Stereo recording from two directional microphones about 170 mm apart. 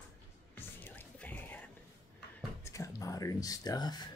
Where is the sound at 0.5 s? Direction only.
10° left (ahead or behind).